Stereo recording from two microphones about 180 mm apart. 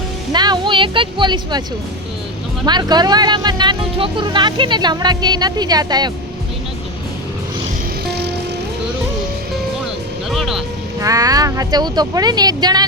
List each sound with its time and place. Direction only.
0.3 s speech: 25° right (ahead or behind)
2.6 s speech: 25° right (ahead or behind)
10.2 s music: centre (ahead or behind)
11.0 s speech: 20° right (ahead or behind)